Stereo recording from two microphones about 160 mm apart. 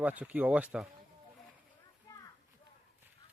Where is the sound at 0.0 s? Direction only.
10° right (ahead or behind).